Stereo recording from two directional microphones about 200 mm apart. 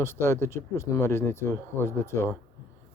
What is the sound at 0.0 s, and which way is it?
Speech, 10° left (ahead or behind).